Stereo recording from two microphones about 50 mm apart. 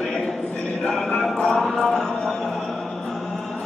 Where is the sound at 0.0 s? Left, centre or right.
Centre.